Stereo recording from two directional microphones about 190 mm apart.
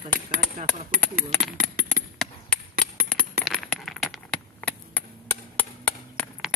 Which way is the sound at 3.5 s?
Centre (ahead or behind).